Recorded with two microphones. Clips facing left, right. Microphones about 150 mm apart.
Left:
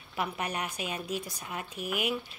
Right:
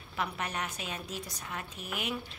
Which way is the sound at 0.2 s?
10° left (ahead or behind).